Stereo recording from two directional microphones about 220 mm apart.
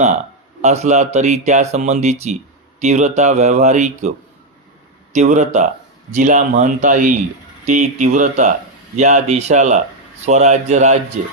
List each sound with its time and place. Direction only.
0.6 s speech: 30° right (ahead or behind)
5.1 s speech: 30° right (ahead or behind)